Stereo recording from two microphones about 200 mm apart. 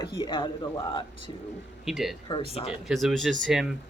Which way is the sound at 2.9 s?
Centre (ahead or behind).